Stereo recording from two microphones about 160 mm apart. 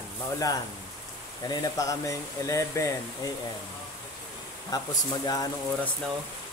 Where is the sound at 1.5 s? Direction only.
20° left (ahead or behind).